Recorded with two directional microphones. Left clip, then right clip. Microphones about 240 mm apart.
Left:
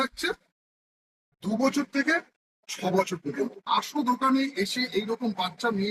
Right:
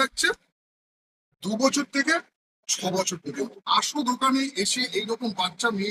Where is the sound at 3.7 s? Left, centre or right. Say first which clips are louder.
Right 3 dB; centre.